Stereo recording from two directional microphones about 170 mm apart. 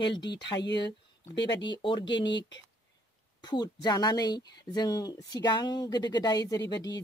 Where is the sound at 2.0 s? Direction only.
90° left.